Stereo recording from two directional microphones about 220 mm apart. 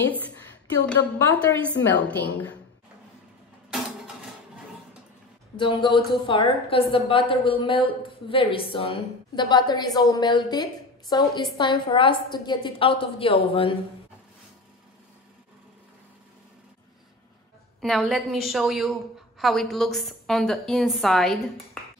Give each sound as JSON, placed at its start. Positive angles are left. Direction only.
{"t": 0.8, "sound": "a woman's voice", "side_deg": 5}
{"t": 5.6, "sound": "a woman's voice", "side_deg": 20}
{"t": 17.7, "sound": "a woman's voice", "side_deg": 0}